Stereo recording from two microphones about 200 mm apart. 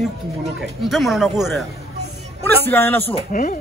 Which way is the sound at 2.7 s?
10° left (ahead or behind).